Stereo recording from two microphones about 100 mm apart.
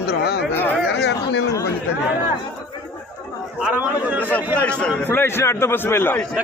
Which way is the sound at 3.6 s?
15° right (ahead or behind).